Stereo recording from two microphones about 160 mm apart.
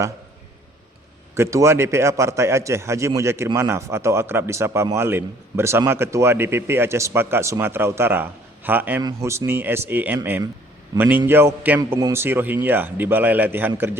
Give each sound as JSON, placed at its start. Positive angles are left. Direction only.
{"t": 1.4, "sound": "a man's voice", "side_deg": -20}